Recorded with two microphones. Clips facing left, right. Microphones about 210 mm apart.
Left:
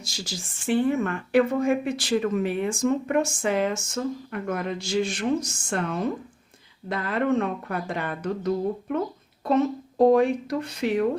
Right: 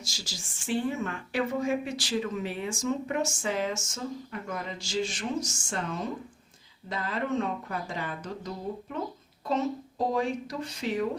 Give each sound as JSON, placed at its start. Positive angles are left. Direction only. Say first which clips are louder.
{"t": 0.0, "sound": "speech", "louder": "left 7 dB", "side_deg": 60}